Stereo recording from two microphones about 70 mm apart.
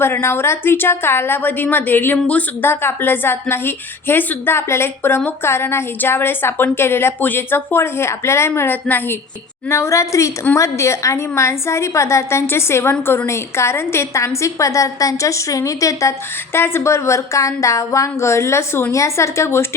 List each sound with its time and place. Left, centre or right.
0.0 s a woman's voice: left
2.1 s speech: centre
2.6 s a woman's voice: left
9.6 s a woman's voice: left
16.5 s speech: left